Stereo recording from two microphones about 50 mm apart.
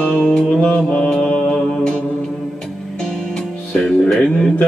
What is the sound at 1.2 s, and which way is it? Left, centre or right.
Mantra, left.